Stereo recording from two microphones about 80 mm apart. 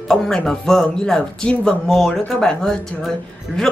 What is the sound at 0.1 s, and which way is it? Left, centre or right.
Speech, centre.